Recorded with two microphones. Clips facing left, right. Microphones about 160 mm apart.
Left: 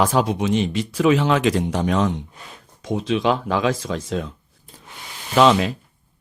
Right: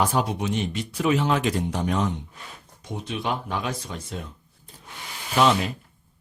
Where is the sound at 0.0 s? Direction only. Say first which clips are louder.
Left 5 dB; 90° left.